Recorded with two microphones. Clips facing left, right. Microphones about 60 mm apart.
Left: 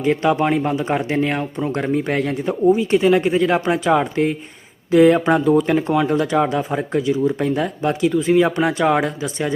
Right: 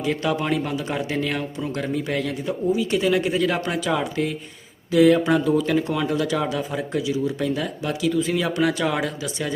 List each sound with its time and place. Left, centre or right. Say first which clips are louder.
0.0 s speech: left 6 dB; left